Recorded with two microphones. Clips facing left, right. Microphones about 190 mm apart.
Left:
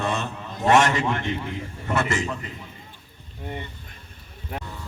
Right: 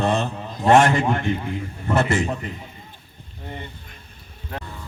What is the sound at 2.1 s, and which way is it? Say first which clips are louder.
Speech: right 4 dB; 35° right (ahead or behind).